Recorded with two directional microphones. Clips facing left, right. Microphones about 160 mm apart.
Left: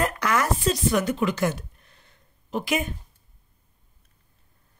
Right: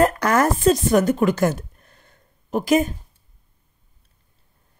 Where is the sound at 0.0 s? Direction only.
40° right (ahead or behind).